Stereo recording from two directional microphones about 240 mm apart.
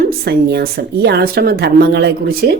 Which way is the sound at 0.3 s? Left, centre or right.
Right.